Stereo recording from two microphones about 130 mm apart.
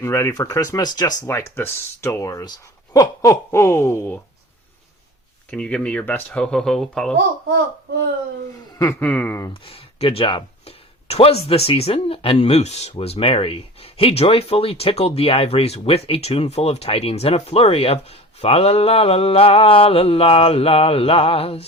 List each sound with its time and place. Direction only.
0.0 s speech: 20° left (ahead or behind)
1.2 s speech: 20° left (ahead or behind)
5.5 s speech: 10° left (ahead or behind)
8.8 s speech: 15° left (ahead or behind)
9.5 s speech: 45° left (ahead or behind)
11.1 s speech: 50° left (ahead or behind)